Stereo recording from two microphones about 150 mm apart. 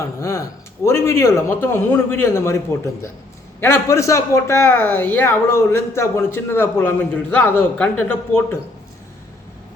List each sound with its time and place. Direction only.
0.0 s a man's voice: 20° left (ahead or behind)